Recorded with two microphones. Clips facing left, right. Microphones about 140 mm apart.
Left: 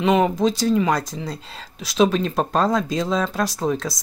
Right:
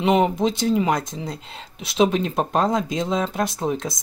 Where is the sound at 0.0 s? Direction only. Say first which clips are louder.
Left 1 dB; 20° right (ahead or behind).